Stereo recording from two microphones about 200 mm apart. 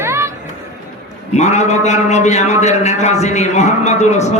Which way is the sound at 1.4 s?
35° left (ahead or behind).